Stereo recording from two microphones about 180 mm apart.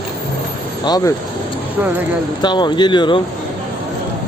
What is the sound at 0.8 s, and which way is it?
Speech, 20° left (ahead or behind).